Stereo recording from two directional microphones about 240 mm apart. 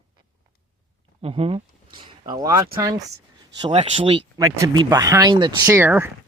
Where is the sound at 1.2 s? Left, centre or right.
Right.